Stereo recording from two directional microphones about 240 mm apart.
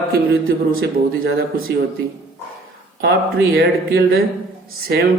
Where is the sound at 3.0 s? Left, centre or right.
Right.